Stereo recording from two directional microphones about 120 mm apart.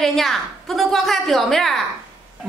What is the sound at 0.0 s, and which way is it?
Speech, centre (ahead or behind).